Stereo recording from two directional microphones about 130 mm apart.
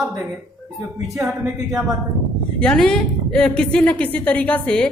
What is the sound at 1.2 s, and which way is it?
A woman's voice, centre (ahead or behind).